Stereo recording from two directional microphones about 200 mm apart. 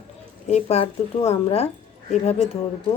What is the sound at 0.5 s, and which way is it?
A woman's voice, 35° left (ahead or behind).